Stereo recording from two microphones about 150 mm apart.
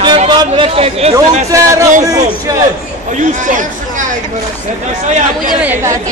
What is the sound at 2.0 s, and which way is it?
Speech, 25° right (ahead or behind).